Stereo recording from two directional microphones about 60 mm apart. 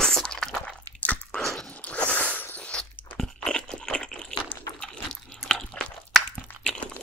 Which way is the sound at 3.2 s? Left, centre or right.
Centre.